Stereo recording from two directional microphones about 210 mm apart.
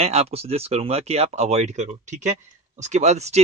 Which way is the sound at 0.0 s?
30° right (ahead or behind).